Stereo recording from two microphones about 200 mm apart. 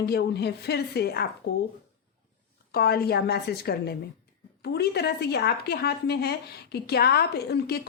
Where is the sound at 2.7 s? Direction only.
50° left (ahead or behind).